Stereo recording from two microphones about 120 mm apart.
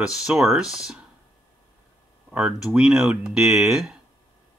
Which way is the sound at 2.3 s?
5° right (ahead or behind).